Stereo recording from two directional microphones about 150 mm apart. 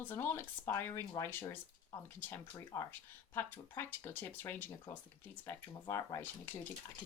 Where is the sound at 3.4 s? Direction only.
15° left (ahead or behind).